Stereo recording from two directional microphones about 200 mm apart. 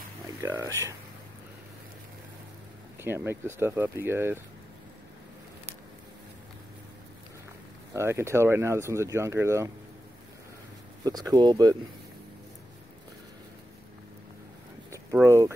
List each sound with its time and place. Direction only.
0.4 s speech: 15° right (ahead or behind)
3.0 s speech: 10° right (ahead or behind)
7.9 s speech: 15° right (ahead or behind)
11.1 s speech: 20° right (ahead or behind)
15.1 s speech: 15° right (ahead or behind)